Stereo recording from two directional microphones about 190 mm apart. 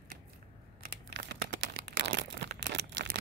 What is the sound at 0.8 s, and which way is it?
Crumpling, 65° right (ahead or behind).